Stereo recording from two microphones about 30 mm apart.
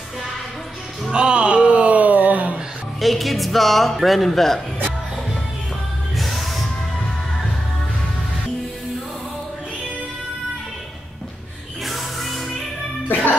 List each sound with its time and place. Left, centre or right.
1.1 s a sound: right
3.0 s speech: centre
6.1 s music: centre
11.8 s music: centre